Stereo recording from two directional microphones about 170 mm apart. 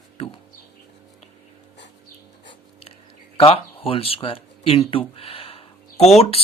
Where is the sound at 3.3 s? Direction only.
35° left (ahead or behind).